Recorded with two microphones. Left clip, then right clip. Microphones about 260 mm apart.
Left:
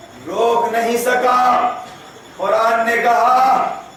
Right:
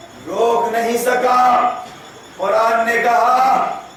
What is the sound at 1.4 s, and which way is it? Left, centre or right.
A man's voice, centre.